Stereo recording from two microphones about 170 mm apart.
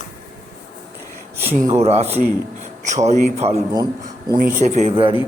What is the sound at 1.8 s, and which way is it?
Speech, 35° right (ahead or behind).